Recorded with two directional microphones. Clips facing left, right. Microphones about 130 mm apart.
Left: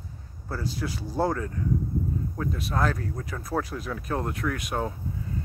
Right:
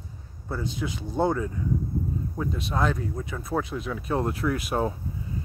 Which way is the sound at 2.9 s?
5° right (ahead or behind).